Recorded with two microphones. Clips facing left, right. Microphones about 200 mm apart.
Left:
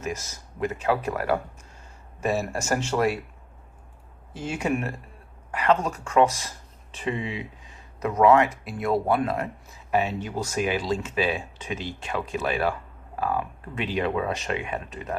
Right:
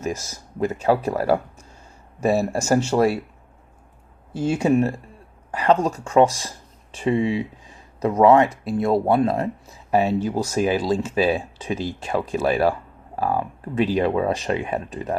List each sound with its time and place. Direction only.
0.0 s speech: 30° right (ahead or behind)
4.4 s speech: 30° right (ahead or behind)